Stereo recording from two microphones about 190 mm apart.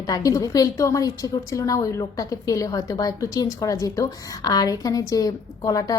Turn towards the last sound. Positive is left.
turn(degrees=20)  # may be behind; listen again after turning